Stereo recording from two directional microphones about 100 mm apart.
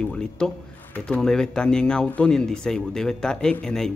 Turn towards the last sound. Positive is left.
turn(degrees=5)  # may be behind; listen again after turning